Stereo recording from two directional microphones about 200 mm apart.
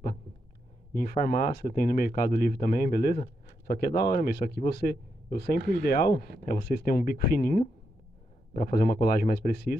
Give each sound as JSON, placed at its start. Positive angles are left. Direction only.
{"t": 0.9, "sound": "speech", "side_deg": 40}